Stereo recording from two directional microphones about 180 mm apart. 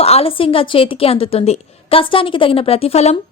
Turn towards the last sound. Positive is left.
turn(degrees=35)  # may be behind; listen again after turning